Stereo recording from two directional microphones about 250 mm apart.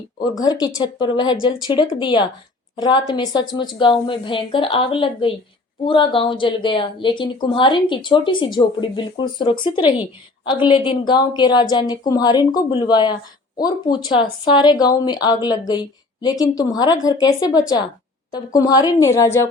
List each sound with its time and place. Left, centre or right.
0.2 s a woman's voice: centre